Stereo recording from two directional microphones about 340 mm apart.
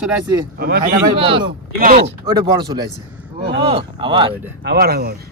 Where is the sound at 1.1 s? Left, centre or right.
Centre.